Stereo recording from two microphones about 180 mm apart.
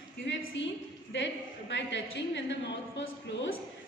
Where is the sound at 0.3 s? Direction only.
90° left.